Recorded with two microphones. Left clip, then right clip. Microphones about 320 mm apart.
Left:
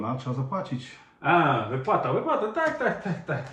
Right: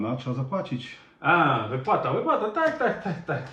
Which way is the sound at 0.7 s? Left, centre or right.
Centre.